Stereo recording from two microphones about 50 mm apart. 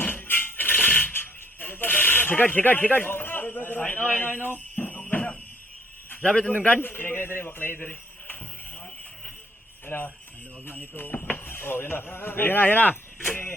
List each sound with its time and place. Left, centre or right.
0.0 s a sound: left
6.2 s a man's voice: centre
6.5 s a man's voice: left
6.8 s speech: left
7.8 s a sound: left
9.8 s speech: left